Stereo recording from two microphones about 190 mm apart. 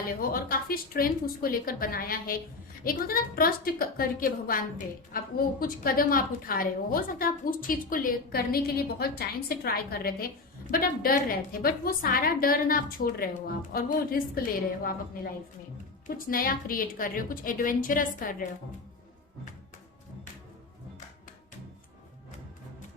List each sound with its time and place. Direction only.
0.2 s a woman's voice: 50° left (ahead or behind)